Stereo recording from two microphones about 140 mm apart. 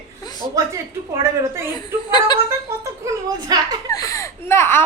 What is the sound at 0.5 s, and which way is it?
Speech, 20° right (ahead or behind).